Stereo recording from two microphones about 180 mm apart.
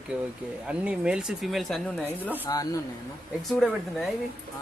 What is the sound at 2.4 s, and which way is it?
Speech, 20° left (ahead or behind).